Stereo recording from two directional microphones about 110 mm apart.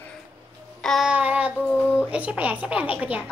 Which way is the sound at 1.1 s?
15° right (ahead or behind).